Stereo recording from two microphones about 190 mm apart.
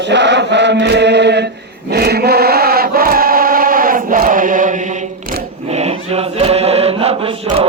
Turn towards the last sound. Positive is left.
turn(degrees=-30)  # may be behind; listen again after turning